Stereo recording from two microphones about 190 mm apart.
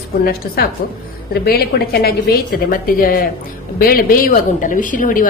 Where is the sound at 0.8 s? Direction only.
55° left (ahead or behind).